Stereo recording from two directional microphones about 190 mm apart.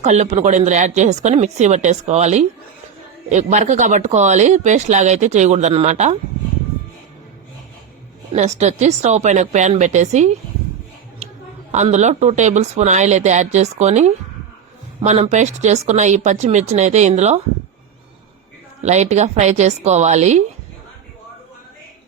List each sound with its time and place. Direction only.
0.0 s speech: 35° right (ahead or behind)
8.3 s speech: 35° right (ahead or behind)
11.2 s a sound: 35° right (ahead or behind)
11.7 s speech: 40° right (ahead or behind)
18.8 s speech: 35° right (ahead or behind)